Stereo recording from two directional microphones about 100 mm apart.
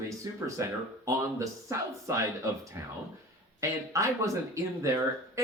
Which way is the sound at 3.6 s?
30° right (ahead or behind).